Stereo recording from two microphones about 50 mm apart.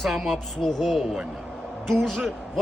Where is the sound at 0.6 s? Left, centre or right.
Centre.